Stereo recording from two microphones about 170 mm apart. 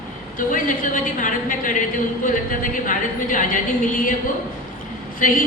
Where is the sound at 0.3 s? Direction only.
50° left (ahead or behind).